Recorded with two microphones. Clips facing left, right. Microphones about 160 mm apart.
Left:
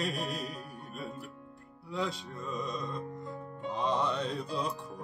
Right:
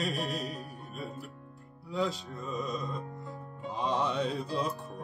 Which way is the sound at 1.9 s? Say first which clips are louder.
Right 3 dB; centre (ahead or behind).